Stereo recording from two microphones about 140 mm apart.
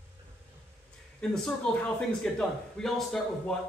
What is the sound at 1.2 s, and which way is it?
Speech, 5° left (ahead or behind).